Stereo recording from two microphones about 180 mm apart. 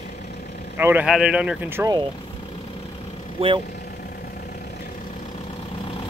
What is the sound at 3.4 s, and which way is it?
Speech, 35° right (ahead or behind).